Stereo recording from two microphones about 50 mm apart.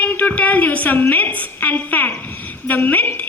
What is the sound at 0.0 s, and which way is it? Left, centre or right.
A woman's voice, left.